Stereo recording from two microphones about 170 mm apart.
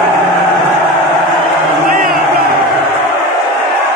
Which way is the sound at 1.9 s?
60° right (ahead or behind).